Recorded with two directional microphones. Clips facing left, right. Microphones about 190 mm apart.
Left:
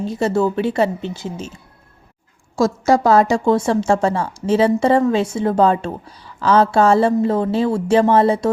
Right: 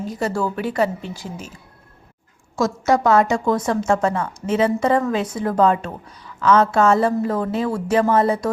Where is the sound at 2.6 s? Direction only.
30° left (ahead or behind).